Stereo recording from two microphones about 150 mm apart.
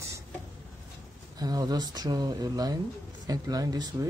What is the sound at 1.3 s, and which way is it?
Speech, 25° right (ahead or behind).